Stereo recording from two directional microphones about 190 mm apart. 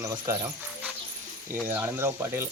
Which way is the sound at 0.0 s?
15° right (ahead or behind).